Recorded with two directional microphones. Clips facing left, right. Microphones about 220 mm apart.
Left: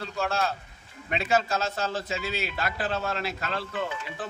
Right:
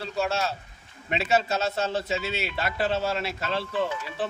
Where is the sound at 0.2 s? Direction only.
Centre (ahead or behind).